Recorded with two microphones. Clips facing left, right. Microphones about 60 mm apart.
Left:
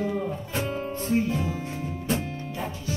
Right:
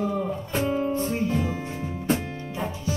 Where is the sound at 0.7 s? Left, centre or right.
Centre.